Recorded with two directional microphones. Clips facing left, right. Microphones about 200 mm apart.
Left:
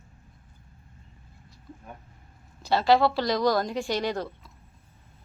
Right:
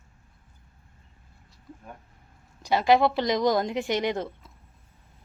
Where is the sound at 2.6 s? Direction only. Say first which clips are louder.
Even; 15° right (ahead or behind).